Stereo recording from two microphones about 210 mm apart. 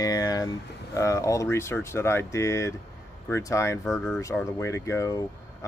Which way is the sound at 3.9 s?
Centre (ahead or behind).